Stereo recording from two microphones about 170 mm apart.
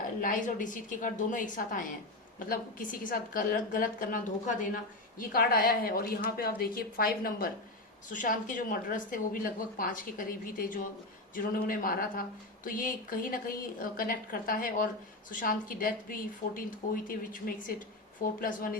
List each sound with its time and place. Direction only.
0.2 s a woman's voice: 50° left (ahead or behind)
5.3 s a woman's voice: 60° left (ahead or behind)
8.1 s a woman's voice: 50° left (ahead or behind)